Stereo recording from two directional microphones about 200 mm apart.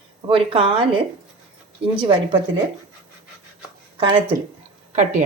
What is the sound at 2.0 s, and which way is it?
Speech, 25° right (ahead or behind).